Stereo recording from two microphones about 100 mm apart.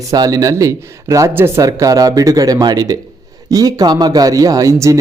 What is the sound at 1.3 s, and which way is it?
Speech, 20° right (ahead or behind).